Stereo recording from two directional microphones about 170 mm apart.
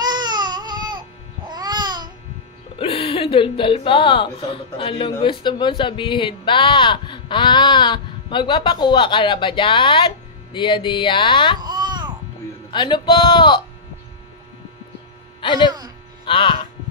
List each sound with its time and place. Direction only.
0.0 s baby cry: 25° right (ahead or behind)
1.5 s babbling: 25° right (ahead or behind)
2.8 s a woman's voice: 35° left (ahead or behind)
11.6 s babbling: 25° right (ahead or behind)
12.7 s a woman's voice: 30° left (ahead or behind)
15.4 s speech: 30° left (ahead or behind)